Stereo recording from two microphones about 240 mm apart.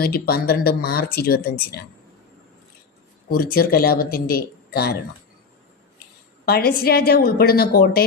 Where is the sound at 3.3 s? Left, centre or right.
Left.